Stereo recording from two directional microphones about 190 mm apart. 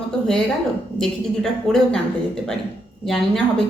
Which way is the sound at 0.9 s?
Centre (ahead or behind).